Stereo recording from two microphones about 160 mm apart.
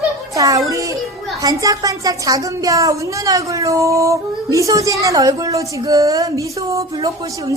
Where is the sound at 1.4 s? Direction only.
20° right (ahead or behind).